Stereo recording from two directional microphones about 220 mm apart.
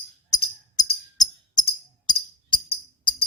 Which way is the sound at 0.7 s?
20° left (ahead or behind).